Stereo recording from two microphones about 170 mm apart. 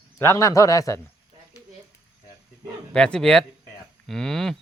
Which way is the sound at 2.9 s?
5° left (ahead or behind).